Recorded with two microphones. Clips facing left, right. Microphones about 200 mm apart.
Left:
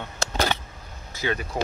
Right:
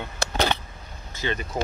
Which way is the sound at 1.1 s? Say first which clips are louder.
Left 1 dB; 10° left (ahead or behind).